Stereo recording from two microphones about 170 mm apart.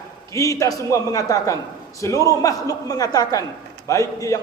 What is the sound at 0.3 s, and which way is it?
A man's voice, 20° left (ahead or behind).